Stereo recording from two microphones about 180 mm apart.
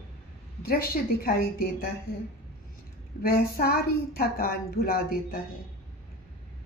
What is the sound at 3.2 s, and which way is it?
Speech, 55° left (ahead or behind).